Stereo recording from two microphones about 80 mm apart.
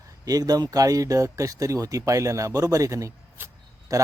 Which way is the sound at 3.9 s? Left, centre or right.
Right.